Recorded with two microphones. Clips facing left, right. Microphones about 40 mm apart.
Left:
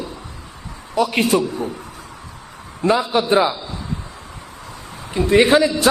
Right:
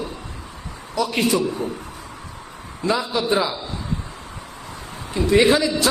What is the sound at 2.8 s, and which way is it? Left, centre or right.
Speech, left.